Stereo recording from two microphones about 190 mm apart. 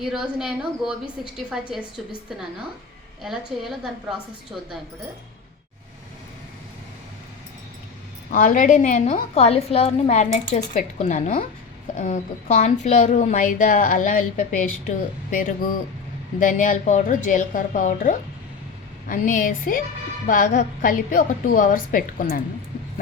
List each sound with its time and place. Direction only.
0.0 s a woman's voice: centre (ahead or behind)
3.2 s a woman's voice: centre (ahead or behind)
8.3 s a woman's voice: 40° left (ahead or behind)
16.4 s a woman's voice: 45° left (ahead or behind)